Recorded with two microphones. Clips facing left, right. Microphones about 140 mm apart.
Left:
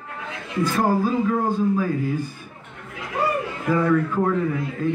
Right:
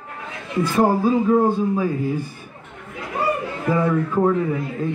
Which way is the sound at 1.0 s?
25° right (ahead or behind).